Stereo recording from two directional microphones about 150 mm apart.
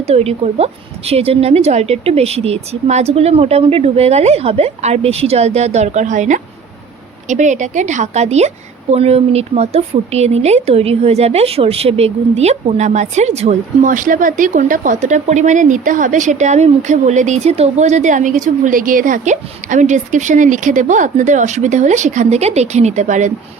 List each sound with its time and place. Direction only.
0.0 s a woman's voice: 45° right (ahead or behind)